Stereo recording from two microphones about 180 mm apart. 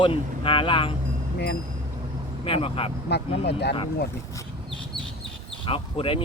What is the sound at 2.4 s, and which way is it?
Speech, 30° left (ahead or behind).